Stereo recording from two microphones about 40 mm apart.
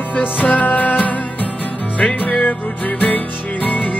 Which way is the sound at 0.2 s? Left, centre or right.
Left.